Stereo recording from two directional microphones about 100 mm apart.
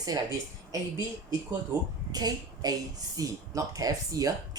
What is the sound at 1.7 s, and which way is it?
Speech, 25° right (ahead or behind).